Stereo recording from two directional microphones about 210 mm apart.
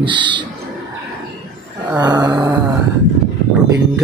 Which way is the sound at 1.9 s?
20° right (ahead or behind).